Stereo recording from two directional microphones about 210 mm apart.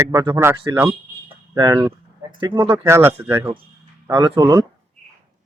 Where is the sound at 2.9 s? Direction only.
10° right (ahead or behind).